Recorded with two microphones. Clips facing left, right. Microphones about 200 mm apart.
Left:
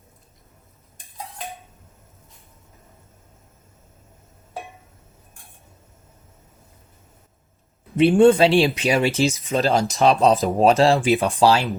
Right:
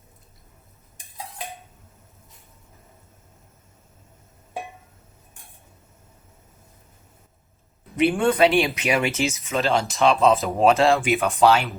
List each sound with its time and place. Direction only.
7.9 s speech: 30° left (ahead or behind)